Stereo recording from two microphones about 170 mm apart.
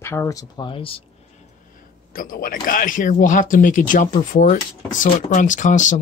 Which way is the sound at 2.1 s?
55° left (ahead or behind).